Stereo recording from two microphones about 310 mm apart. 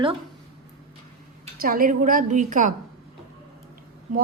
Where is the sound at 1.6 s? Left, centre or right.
Right.